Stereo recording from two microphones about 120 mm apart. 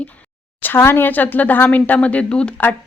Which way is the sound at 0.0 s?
10° left (ahead or behind).